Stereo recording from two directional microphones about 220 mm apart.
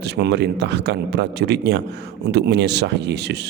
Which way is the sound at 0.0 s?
50° right (ahead or behind).